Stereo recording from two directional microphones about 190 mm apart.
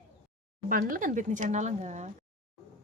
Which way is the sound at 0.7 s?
45° right (ahead or behind).